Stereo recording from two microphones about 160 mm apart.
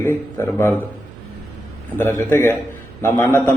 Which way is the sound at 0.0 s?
15° left (ahead or behind).